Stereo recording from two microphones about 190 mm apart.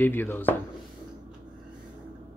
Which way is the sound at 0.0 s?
10° left (ahead or behind).